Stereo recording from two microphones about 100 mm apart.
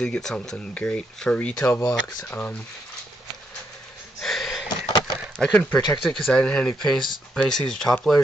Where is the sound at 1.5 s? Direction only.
25° left (ahead or behind).